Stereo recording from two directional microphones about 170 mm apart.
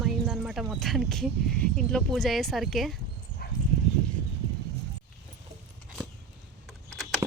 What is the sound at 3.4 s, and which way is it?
Dog, 70° left (ahead or behind).